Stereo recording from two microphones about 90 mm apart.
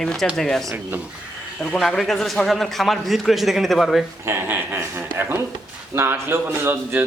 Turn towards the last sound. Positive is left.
turn(degrees=-25)  # may be behind; listen again after turning